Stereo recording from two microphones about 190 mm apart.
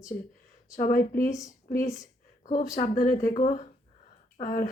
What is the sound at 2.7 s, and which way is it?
Speech, 45° left (ahead or behind).